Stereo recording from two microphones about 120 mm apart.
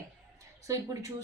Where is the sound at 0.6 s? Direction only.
25° right (ahead or behind).